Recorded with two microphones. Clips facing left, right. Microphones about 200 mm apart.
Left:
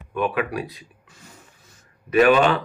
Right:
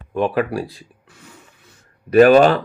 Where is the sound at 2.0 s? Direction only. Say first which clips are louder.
Right 6 dB; 40° right (ahead or behind).